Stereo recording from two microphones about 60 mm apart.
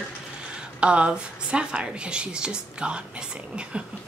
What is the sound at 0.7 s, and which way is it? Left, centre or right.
A woman's voice, centre.